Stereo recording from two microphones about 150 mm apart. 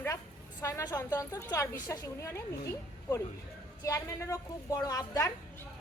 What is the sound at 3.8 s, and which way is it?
A woman's voice, 20° left (ahead or behind).